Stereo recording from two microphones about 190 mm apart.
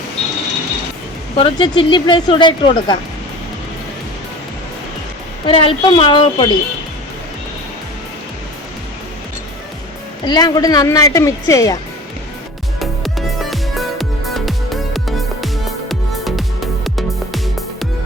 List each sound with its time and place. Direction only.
1.4 s speech: 25° left (ahead or behind)
5.5 s speech: 25° left (ahead or behind)
10.2 s speech: 20° left (ahead or behind)
12.8 s music: centre (ahead or behind)